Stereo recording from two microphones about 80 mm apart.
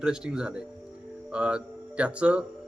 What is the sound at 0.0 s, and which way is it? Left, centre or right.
Speech, centre.